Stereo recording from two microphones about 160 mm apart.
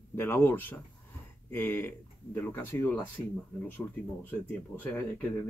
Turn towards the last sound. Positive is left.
turn(degrees=10)  # may be behind; listen again after turning